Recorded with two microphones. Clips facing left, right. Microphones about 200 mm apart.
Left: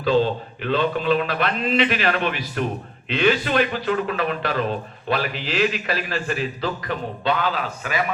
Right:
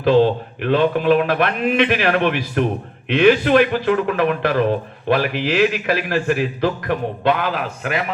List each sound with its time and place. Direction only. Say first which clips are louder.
0.1 s a man's voice: right 5 dB; 60° right (ahead or behind)